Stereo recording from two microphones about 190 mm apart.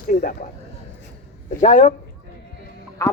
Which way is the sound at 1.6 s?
35° left (ahead or behind).